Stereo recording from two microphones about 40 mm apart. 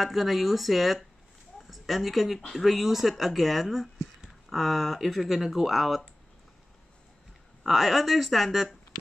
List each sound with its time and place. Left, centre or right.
0.0 s a woman's voice: centre
7.6 s speech: centre